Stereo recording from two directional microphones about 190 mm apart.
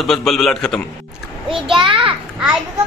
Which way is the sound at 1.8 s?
25° right (ahead or behind).